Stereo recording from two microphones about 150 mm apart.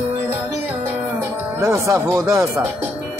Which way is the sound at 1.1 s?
20° right (ahead or behind).